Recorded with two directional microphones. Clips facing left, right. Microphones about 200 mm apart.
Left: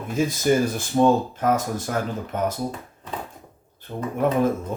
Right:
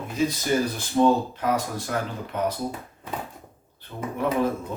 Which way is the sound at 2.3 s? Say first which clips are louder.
Left 1 dB; 45° left (ahead or behind).